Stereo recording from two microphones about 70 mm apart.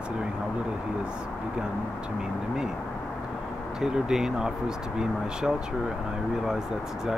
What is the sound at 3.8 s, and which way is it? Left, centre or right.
Speech, centre.